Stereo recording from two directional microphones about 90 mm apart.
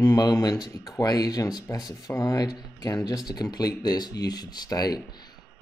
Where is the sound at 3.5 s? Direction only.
50° left (ahead or behind).